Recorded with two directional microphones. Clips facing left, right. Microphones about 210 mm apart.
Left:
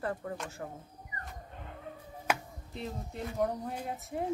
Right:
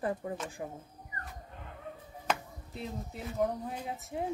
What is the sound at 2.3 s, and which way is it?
Music, 10° left (ahead or behind).